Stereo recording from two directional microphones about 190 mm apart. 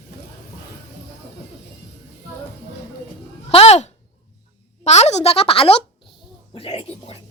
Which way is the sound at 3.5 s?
30° left (ahead or behind).